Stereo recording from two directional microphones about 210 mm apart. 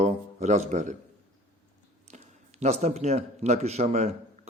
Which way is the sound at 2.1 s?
30° right (ahead or behind).